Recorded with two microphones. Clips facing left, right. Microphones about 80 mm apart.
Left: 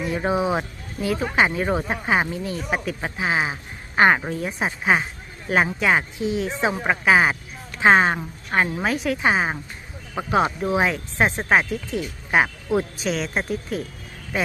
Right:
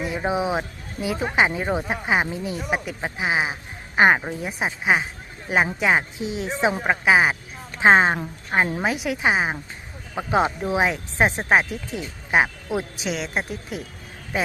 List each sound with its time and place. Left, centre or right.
0.0 s speech: centre; by 6.7 s right
6.7 s speech: centre
7.8 s a woman's voice: right
10.2 s speech: right
13.0 s speech: centre